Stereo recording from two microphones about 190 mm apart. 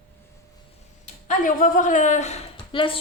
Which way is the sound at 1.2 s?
45° left (ahead or behind).